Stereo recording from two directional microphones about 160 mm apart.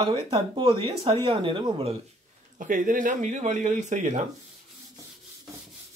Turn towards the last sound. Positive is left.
turn(degrees=-50)  # may be behind; listen again after turning